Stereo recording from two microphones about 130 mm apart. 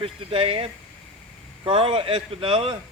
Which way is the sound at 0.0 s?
45° right (ahead or behind).